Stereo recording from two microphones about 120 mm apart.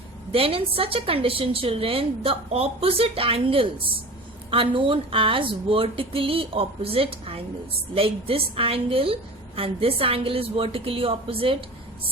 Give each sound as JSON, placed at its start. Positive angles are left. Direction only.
{"t": 0.3, "sound": "a woman's voice", "side_deg": -50}